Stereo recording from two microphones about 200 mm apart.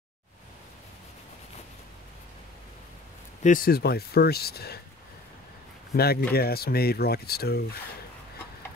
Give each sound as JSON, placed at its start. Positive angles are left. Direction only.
{"t": 3.4, "sound": "speech", "side_deg": 45}
{"t": 5.9, "sound": "speech", "side_deg": 50}